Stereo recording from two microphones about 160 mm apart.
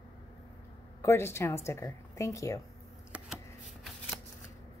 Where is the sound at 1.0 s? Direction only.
15° left (ahead or behind).